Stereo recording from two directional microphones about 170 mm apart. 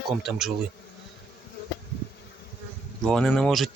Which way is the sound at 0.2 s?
Centre (ahead or behind).